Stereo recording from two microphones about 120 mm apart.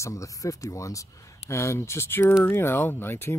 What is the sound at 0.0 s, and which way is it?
Speech, 25° left (ahead or behind).